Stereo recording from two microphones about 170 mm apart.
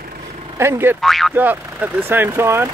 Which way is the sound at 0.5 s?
15° right (ahead or behind).